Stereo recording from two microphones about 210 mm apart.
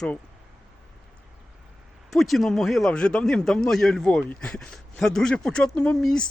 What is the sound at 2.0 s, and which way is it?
A man's voice, centre (ahead or behind).